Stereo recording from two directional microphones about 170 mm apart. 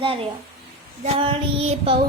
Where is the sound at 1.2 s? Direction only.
35° right (ahead or behind).